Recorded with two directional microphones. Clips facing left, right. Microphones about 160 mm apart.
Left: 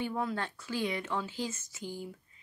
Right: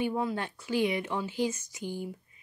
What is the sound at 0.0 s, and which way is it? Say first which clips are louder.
Speech: right 3 dB; 10° right (ahead or behind).